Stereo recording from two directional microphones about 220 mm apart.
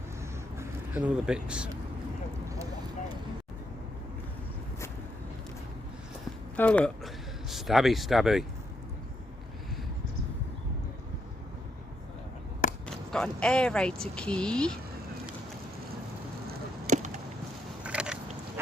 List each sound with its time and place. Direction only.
0.6 s speech: 10° right (ahead or behind)
6.6 s speech: 5° left (ahead or behind)
13.1 s speech: 5° left (ahead or behind)
16.5 s chop: 35° right (ahead or behind)
17.8 s biting: 5° right (ahead or behind)